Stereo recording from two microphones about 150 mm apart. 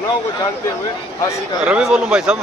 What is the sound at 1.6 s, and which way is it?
Speech, 5° right (ahead or behind).